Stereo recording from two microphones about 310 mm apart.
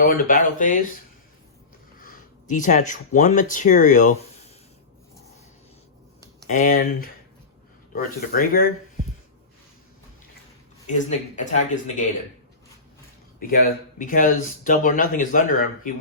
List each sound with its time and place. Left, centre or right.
0.0 s speech: left
2.0 s speech: left
6.5 s speech: left
10.8 s speech: left
13.5 s speech: left